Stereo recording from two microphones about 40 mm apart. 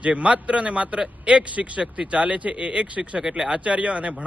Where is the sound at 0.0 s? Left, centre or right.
Right.